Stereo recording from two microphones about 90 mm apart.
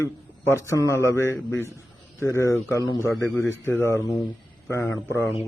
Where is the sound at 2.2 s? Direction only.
30° left (ahead or behind).